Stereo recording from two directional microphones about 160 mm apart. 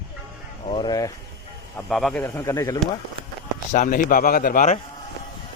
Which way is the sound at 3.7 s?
55° left (ahead or behind).